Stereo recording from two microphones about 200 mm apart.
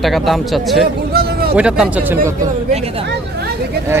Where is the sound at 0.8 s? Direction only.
50° right (ahead or behind).